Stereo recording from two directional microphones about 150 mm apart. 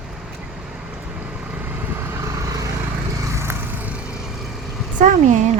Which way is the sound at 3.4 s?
15° right (ahead or behind).